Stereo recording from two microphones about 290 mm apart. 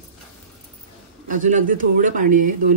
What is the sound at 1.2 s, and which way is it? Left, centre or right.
A man's voice, right.